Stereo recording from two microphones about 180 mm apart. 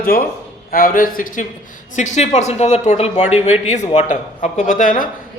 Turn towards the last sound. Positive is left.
turn(degrees=50)  # may be behind; listen again after turning